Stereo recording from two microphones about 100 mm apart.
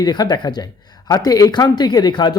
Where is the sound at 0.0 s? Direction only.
45° left (ahead or behind).